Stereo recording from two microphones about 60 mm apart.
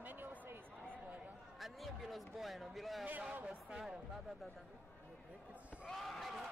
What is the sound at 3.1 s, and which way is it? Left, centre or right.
Speech, right.